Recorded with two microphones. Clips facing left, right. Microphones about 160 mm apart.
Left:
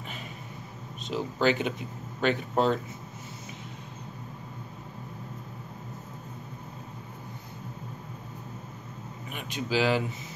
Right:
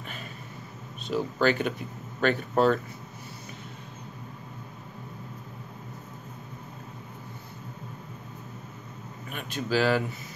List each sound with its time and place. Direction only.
1.0 s speech: 15° left (ahead or behind)
9.3 s speech: 15° left (ahead or behind)